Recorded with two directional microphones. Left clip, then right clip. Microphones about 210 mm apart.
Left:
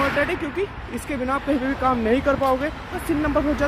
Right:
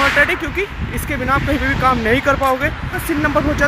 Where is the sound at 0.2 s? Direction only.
10° right (ahead or behind).